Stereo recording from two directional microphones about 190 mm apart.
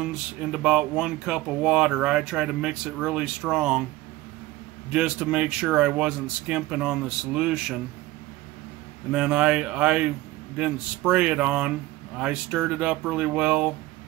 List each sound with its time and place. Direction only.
0.0 s speech: 5° right (ahead or behind)
4.9 s speech: 5° right (ahead or behind)
9.1 s speech: 5° right (ahead or behind)